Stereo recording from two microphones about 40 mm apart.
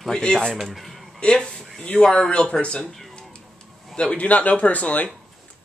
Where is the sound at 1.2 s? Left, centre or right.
Left.